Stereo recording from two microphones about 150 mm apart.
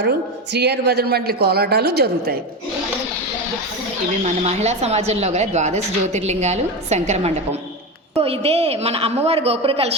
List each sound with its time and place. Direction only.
0.5 s a woman's voice: 90° right
4.2 s a woman's voice: 45° right (ahead or behind)